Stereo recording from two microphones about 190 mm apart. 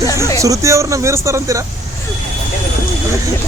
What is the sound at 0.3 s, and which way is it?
Speech, 15° right (ahead or behind).